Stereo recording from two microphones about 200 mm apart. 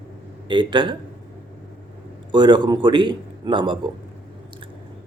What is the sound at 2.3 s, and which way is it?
Speech, 20° right (ahead or behind).